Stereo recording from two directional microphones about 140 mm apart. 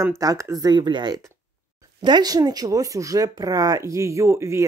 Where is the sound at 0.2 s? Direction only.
25° right (ahead or behind).